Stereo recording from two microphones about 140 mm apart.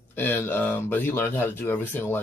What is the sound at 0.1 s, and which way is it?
Speech, 15° left (ahead or behind).